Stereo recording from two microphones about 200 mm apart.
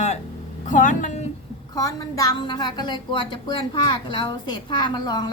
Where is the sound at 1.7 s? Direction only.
15° left (ahead or behind).